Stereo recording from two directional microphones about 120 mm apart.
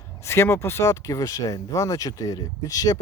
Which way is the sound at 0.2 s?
20° left (ahead or behind).